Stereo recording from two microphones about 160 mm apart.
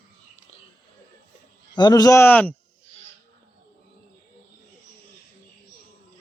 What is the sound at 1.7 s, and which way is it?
Speech, 25° left (ahead or behind).